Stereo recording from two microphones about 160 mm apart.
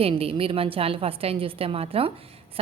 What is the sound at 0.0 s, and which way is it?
A woman's voice, 35° right (ahead or behind).